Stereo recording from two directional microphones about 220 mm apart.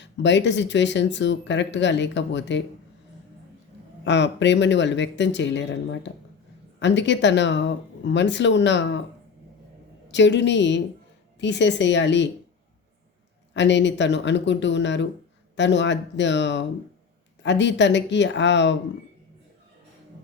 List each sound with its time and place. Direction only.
0.0 s speech: 55° left (ahead or behind)
4.0 s speech: 55° left (ahead or behind)
10.1 s speech: 55° left (ahead or behind)
13.5 s speech: 55° left (ahead or behind)